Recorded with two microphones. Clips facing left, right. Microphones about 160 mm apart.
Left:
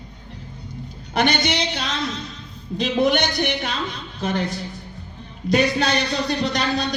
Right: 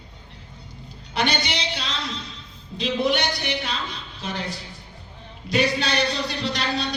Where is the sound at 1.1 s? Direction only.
50° left (ahead or behind).